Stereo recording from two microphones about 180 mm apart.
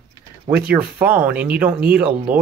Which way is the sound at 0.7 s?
5° right (ahead or behind).